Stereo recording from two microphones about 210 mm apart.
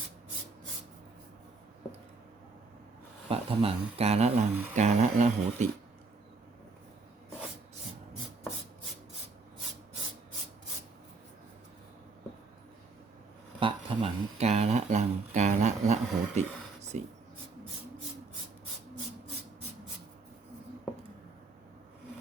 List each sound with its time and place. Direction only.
3.2 s speech: 30° right (ahead or behind)
13.6 s a sound: 25° right (ahead or behind)
16.9 s writing: 35° right (ahead or behind)